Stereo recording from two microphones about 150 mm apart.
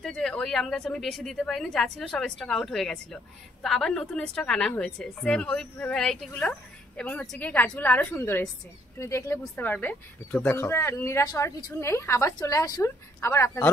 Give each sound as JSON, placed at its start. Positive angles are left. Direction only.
{"t": 0.0, "sound": "a woman's voice", "side_deg": 5}